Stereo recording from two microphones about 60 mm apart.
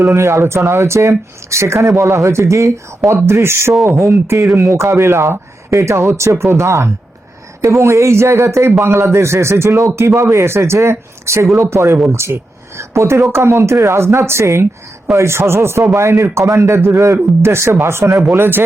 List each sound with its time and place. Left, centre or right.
0.0 s a man's voice: right
18.2 s speech: right